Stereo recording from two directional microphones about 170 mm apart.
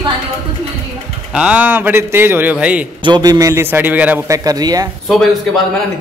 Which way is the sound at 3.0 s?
25° right (ahead or behind).